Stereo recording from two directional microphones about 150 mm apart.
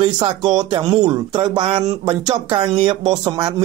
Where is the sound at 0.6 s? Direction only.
30° right (ahead or behind).